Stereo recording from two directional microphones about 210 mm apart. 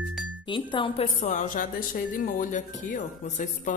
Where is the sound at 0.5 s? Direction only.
25° left (ahead or behind).